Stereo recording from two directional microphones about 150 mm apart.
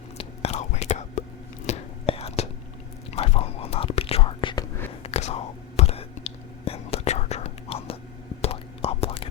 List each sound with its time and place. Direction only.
0.2 s whispering: 45° left (ahead or behind)
5.0 s whispering: 45° left (ahead or behind)